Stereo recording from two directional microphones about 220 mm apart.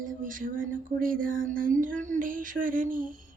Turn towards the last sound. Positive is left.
turn(degrees=-40)  # may be behind; listen again after turning